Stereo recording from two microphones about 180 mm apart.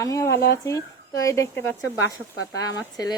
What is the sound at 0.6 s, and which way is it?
A woman's voice, 15° left (ahead or behind).